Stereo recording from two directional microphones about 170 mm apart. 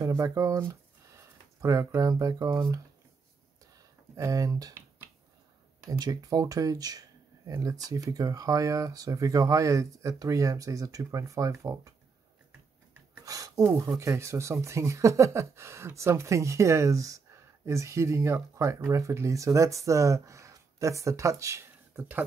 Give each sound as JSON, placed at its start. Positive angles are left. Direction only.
{"t": 0.0, "sound": "speech", "side_deg": -20}
{"t": 3.7, "sound": "a sound", "side_deg": -20}
{"t": 5.9, "sound": "speech", "side_deg": -20}
{"t": 13.2, "sound": "speech", "side_deg": -20}